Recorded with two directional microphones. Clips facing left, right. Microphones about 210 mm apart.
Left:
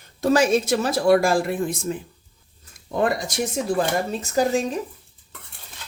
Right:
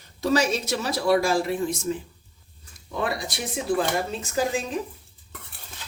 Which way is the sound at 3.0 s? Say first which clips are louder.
Left 6 dB; 45° left (ahead or behind).